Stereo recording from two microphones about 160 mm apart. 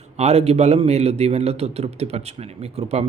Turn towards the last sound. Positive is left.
turn(degrees=-40)  # may be behind; listen again after turning